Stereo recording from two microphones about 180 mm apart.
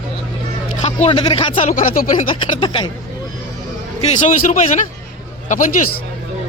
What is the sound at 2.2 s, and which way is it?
Speech, 25° left (ahead or behind).